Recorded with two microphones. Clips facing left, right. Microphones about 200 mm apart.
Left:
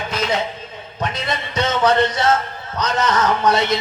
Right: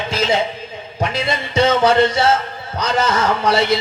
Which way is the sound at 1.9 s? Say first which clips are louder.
Right 3 dB; 10° right (ahead or behind).